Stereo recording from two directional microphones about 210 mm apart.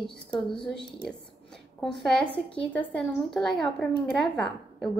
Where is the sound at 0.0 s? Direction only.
Centre (ahead or behind).